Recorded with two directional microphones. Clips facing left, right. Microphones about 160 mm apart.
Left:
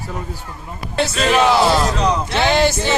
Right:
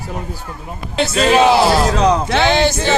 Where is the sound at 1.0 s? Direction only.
30° right (ahead or behind).